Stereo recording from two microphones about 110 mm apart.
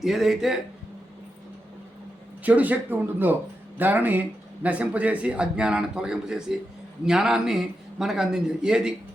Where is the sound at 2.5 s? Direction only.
15° right (ahead or behind).